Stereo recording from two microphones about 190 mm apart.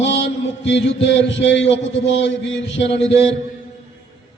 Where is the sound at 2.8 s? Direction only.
35° left (ahead or behind).